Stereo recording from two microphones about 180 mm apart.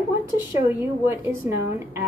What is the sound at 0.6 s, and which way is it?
A woman's voice, 15° right (ahead or behind).